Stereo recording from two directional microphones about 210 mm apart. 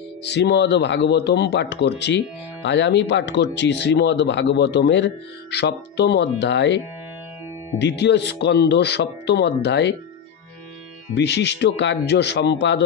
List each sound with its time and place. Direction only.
0.2 s speech: 55° left (ahead or behind)
7.8 s speech: 55° left (ahead or behind)
11.1 s speech: 55° left (ahead or behind)